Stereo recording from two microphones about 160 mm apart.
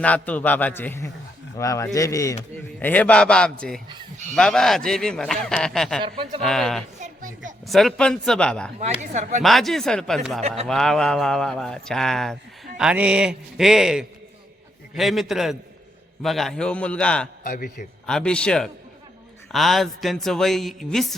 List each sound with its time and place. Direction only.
0.0 s a man's voice: 10° left (ahead or behind)
6.0 s speech: 35° right (ahead or behind)
6.4 s speech: centre (ahead or behind)
7.0 s a sound: 55° right (ahead or behind)
7.7 s speech: centre (ahead or behind)
8.8 s speech: 50° right (ahead or behind)
9.4 s speech: centre (ahead or behind)
17.4 s a man's voice: 65° left (ahead or behind)
18.0 s speech: 5° left (ahead or behind)